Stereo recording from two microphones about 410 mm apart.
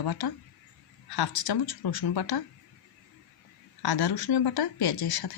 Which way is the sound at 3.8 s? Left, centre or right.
Left.